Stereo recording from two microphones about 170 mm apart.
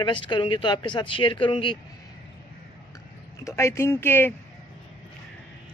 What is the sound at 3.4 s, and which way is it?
Speech, 15° left (ahead or behind).